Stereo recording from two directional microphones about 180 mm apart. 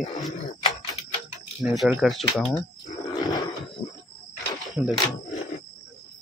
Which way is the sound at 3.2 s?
25° left (ahead or behind).